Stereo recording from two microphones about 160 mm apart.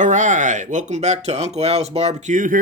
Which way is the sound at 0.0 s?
50° right (ahead or behind).